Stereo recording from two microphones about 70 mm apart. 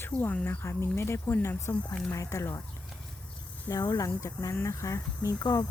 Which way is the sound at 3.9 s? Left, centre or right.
Left.